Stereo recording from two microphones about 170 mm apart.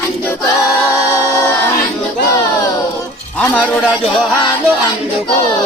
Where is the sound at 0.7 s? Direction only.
15° right (ahead or behind).